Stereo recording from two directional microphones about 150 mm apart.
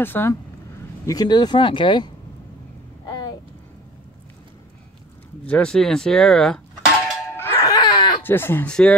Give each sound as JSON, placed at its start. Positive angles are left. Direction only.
{"t": 0.0, "sound": "speech", "side_deg": 15}
{"t": 1.0, "sound": "speech", "side_deg": 25}
{"t": 3.1, "sound": "a sound", "side_deg": 25}
{"t": 5.5, "sound": "speech", "side_deg": 5}
{"t": 7.2, "sound": "music", "side_deg": 15}
{"t": 7.6, "sound": "a sound", "side_deg": 25}
{"t": 8.2, "sound": "speech", "side_deg": 15}